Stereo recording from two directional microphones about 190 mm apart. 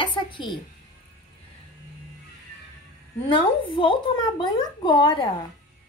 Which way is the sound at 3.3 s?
25° left (ahead or behind).